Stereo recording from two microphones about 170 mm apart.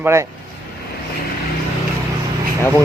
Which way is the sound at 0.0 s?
15° right (ahead or behind).